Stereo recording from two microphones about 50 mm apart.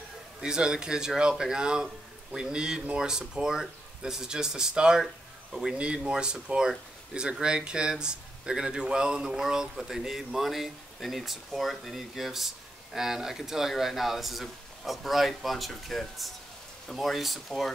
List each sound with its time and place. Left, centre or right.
0.4 s a man's voice: centre